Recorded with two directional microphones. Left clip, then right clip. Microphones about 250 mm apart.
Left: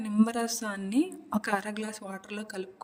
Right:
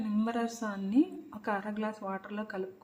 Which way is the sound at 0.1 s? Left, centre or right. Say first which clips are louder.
Left 5 dB; left.